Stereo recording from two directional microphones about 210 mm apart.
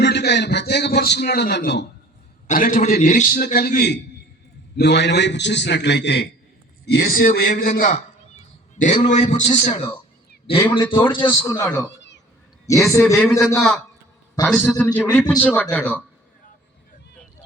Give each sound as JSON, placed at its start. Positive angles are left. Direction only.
{"t": 0.0, "sound": "a man's voice", "side_deg": 55}
{"t": 2.5, "sound": "a man's voice", "side_deg": 40}
{"t": 10.6, "sound": "a man's voice", "side_deg": 10}
{"t": 12.9, "sound": "a man's voice", "side_deg": 15}